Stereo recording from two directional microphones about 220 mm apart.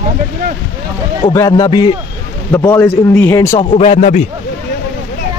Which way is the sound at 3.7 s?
30° left (ahead or behind).